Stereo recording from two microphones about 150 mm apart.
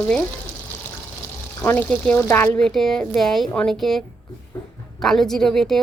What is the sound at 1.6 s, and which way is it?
A woman's voice, 10° left (ahead or behind).